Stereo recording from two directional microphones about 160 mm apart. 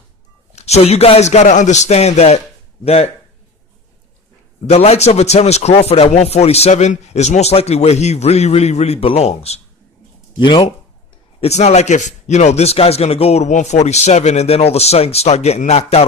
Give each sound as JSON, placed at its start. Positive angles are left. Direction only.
{"t": 0.5, "sound": "a man's voice", "side_deg": 40}
{"t": 4.6, "sound": "a man's voice", "side_deg": 40}
{"t": 10.4, "sound": "speech", "side_deg": 30}
{"t": 11.3, "sound": "speech", "side_deg": 45}